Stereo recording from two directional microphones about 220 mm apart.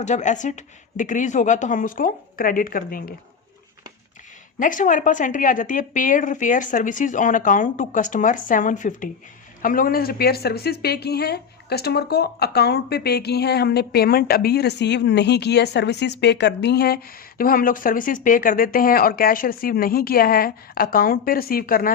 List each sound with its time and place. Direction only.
0.0 s a woman's voice: 35° left (ahead or behind)
4.6 s a woman's voice: 35° left (ahead or behind)